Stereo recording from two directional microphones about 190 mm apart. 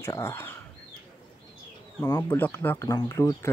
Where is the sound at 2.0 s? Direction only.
15° left (ahead or behind).